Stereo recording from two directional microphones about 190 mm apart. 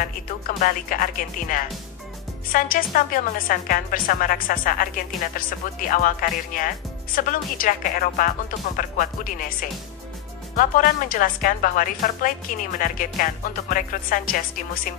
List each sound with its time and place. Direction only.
0.6 s speech: 45° left (ahead or behind)